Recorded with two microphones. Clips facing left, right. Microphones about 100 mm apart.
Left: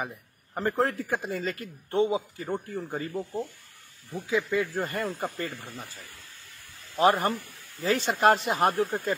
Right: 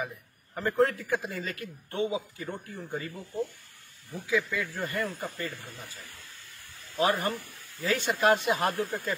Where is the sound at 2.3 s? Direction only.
40° left (ahead or behind).